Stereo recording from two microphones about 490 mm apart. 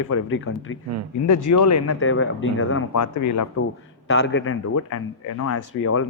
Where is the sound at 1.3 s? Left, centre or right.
Left.